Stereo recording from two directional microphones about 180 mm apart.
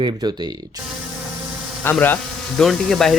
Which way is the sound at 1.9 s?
5° left (ahead or behind).